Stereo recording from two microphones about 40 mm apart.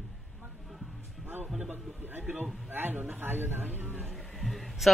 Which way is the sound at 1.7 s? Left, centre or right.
Right.